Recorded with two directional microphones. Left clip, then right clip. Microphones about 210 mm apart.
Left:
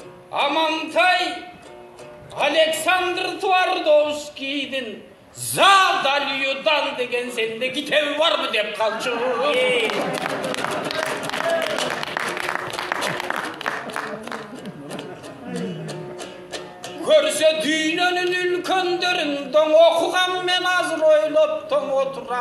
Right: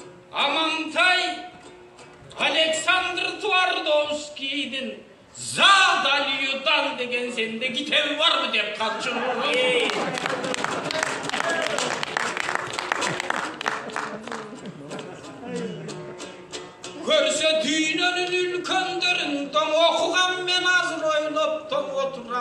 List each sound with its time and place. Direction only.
0.3 s a sound: 50° left (ahead or behind)
2.3 s speech: 50° left (ahead or behind)
10.1 s a sound: 35° right (ahead or behind)
12.9 s music: 45° right (ahead or behind)
13.3 s applause: 45° right (ahead or behind)
16.5 s music: 50° left (ahead or behind)